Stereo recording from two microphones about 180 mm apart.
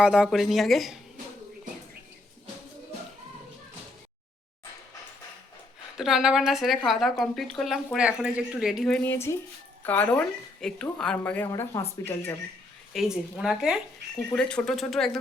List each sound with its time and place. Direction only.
0.0 s speech: 5° right (ahead or behind)
6.0 s a woman's voice: centre (ahead or behind); by 12.3 s 15° left (ahead or behind)
12.9 s speech: centre (ahead or behind)